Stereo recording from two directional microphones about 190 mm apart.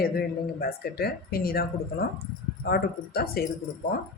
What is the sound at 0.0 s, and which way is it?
Speech, 55° left (ahead or behind).